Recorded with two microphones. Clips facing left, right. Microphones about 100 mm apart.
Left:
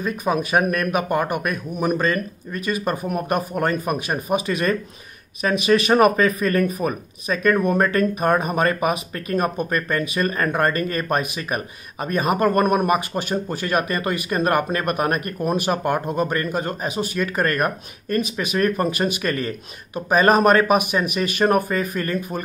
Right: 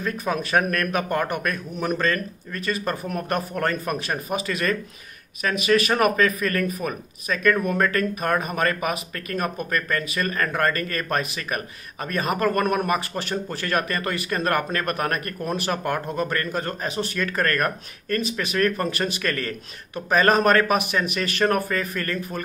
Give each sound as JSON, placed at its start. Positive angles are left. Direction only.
{"t": 0.0, "sound": "speech", "side_deg": 15}